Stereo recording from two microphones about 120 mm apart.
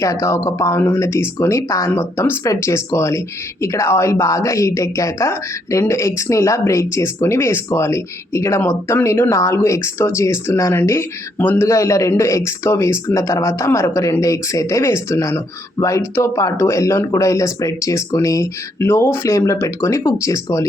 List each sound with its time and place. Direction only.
0.0 s speech: 25° left (ahead or behind)